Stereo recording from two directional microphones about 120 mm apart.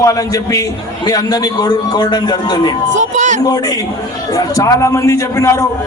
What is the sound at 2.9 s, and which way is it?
Speech, 90° right.